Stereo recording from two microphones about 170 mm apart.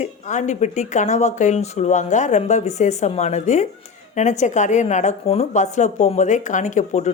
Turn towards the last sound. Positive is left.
turn(degrees=45)  # may be behind; listen again after turning